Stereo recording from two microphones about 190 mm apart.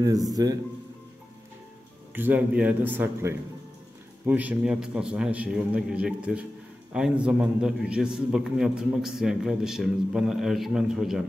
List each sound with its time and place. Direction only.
0.0 s speech: 20° right (ahead or behind)
2.1 s a man's voice: 10° right (ahead or behind)